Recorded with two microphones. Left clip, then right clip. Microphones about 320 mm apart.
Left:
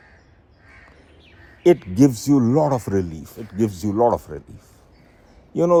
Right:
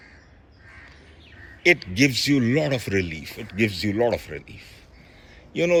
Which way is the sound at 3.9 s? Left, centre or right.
Left.